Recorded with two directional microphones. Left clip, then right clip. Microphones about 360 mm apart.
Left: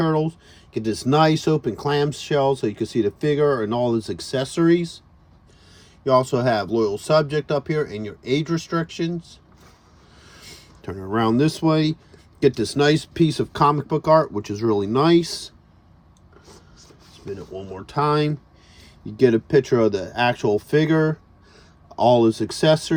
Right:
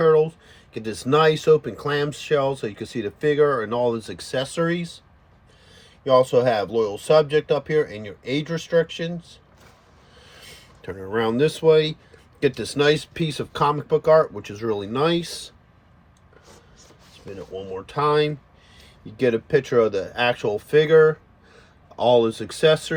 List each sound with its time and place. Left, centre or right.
0.0 s speech: centre
6.4 s speech: centre
10.4 s speech: centre
17.7 s speech: centre
22.0 s speech: centre